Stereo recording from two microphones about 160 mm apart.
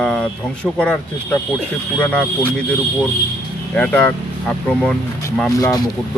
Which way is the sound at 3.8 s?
10° left (ahead or behind).